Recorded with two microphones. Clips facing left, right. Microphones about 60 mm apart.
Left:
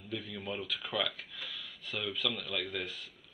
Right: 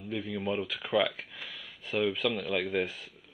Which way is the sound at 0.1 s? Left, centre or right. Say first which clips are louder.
Right 7 dB; right.